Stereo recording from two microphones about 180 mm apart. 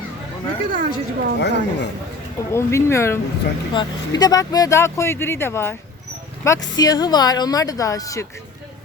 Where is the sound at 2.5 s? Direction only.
15° left (ahead or behind).